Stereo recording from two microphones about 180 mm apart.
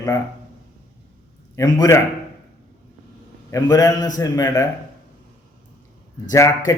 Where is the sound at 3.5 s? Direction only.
20° left (ahead or behind).